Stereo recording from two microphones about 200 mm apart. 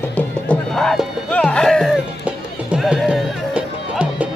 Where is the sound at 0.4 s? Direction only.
5° left (ahead or behind).